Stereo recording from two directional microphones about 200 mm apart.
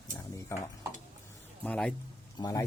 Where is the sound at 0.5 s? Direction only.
15° left (ahead or behind).